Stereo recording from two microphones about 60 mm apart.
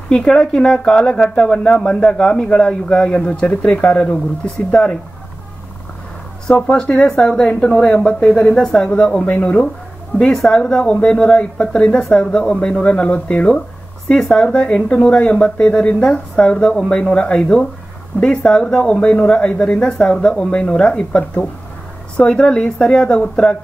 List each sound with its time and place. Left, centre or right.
0.1 s speech: centre
6.7 s speech: centre
10.1 s speech: centre